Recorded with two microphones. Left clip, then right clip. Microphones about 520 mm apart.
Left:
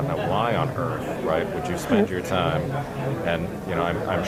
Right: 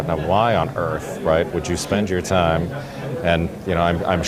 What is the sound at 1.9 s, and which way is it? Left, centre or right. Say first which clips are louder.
Speech: right 3 dB; right.